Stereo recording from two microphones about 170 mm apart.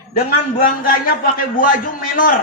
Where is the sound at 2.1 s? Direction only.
55° left (ahead or behind).